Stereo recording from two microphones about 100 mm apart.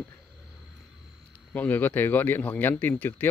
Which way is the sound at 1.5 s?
15° left (ahead or behind).